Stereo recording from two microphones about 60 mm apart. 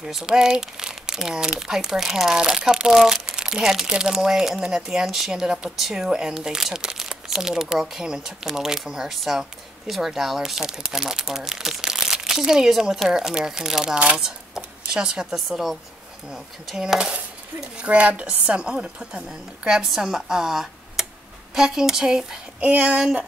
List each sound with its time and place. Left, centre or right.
0.0 s speech: centre
22.6 s speech: right